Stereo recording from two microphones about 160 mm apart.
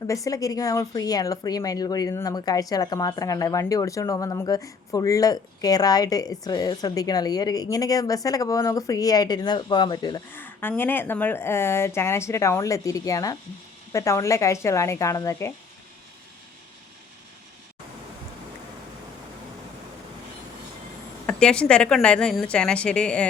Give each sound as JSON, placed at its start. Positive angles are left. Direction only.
{"t": 0.3, "sound": "speech", "side_deg": 20}
{"t": 10.3, "sound": "speech", "side_deg": 10}
{"t": 21.2, "sound": "speech", "side_deg": 5}